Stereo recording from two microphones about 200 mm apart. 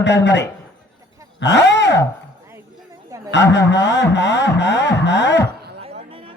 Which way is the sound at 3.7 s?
60° left (ahead or behind).